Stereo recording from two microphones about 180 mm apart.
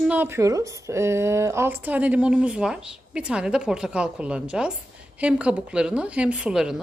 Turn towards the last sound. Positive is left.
turn(degrees=-5)  # may be behind; listen again after turning